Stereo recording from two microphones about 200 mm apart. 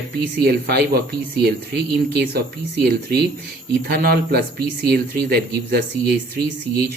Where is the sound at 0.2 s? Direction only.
55° right (ahead or behind).